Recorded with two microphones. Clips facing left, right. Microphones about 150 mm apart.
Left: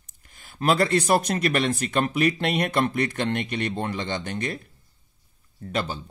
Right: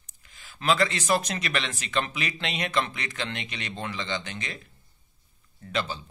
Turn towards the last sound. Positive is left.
turn(degrees=50)  # may be behind; listen again after turning